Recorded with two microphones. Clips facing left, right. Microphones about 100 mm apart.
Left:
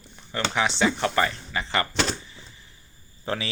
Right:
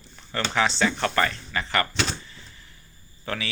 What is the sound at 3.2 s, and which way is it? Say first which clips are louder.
Speech: left 2 dB; 25° left (ahead or behind).